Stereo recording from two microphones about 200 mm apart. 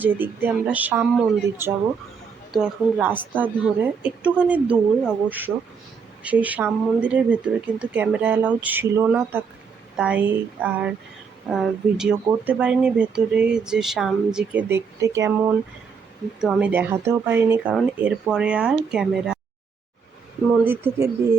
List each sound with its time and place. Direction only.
0.0 s speech: 10° right (ahead or behind)
2.5 s speech: centre (ahead or behind)
16.4 s speech: 5° right (ahead or behind)
20.7 s speech: 10° right (ahead or behind)